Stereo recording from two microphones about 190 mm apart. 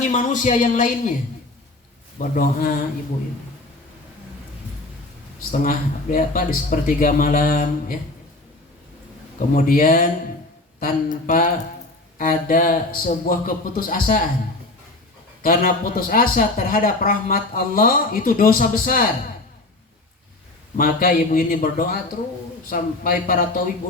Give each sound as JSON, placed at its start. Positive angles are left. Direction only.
{"t": 0.0, "sound": "speech", "side_deg": 40}
{"t": 2.1, "sound": "speech", "side_deg": 45}
{"t": 5.5, "sound": "speech", "side_deg": 45}
{"t": 9.5, "sound": "speech", "side_deg": 45}
{"t": 15.4, "sound": "speech", "side_deg": 45}
{"t": 20.7, "sound": "speech", "side_deg": 45}